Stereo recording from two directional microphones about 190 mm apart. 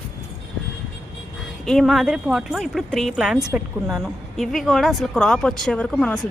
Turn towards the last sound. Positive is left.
turn(degrees=5)  # may be behind; listen again after turning